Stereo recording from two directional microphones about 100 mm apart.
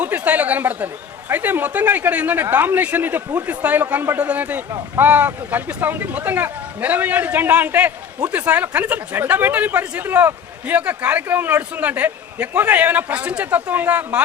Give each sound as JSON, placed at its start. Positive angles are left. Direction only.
{"t": 0.0, "sound": "a woman's voice", "side_deg": -15}